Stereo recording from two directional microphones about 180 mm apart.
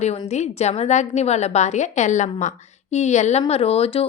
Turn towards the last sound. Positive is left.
turn(degrees=35)  # may be behind; listen again after turning